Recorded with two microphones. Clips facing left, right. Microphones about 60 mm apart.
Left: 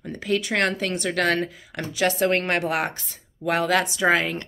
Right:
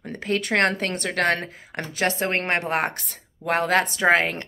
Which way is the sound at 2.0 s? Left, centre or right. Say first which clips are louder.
Left 2 dB; right.